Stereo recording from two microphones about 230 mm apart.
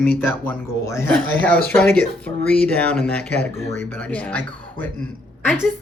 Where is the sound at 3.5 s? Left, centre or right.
Right.